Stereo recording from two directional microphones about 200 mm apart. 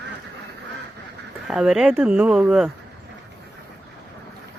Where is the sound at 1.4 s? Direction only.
Centre (ahead or behind).